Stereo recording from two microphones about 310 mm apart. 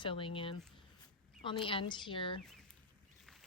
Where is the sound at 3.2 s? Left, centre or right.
Centre.